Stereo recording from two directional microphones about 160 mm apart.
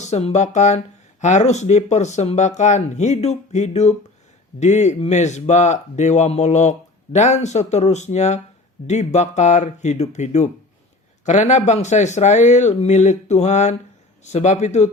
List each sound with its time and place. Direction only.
0.0 s speech: 45° left (ahead or behind)